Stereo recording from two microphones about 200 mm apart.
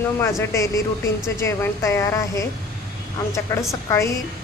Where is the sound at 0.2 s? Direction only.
15° left (ahead or behind).